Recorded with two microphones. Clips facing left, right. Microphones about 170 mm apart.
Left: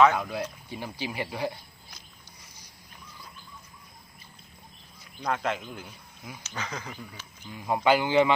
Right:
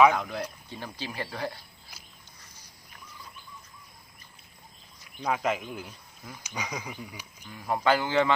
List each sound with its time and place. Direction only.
0.2 s speech: 10° left (ahead or behind)
5.2 s speech: 5° right (ahead or behind)
5.9 s speech: 10° left (ahead or behind)
6.4 s speech: 15° right (ahead or behind)
7.5 s speech: 15° left (ahead or behind)